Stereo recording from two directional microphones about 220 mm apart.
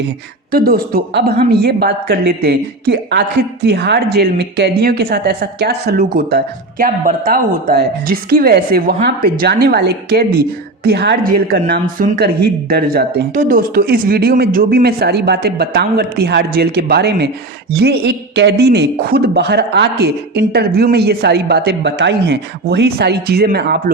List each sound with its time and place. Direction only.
0.5 s speech: 40° right (ahead or behind)